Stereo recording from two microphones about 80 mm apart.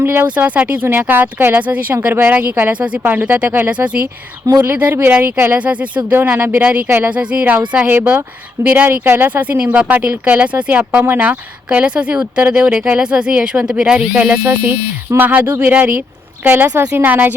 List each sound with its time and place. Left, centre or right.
0.0 s speech: right
4.6 s speech: right
7.1 s speech: centre
15.4 s speech: right